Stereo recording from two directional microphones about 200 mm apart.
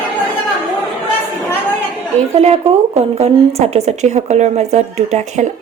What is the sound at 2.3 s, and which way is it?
Speech, 30° right (ahead or behind).